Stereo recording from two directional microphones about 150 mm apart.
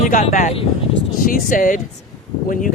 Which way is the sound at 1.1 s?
65° left (ahead or behind).